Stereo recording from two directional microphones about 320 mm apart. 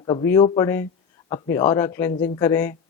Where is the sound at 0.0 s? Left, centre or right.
Centre.